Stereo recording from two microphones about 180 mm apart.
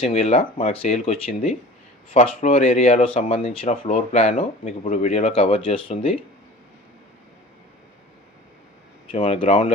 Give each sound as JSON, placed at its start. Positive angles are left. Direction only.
{"t": 0.0, "sound": "speech", "side_deg": 35}
{"t": 9.0, "sound": "speech", "side_deg": 35}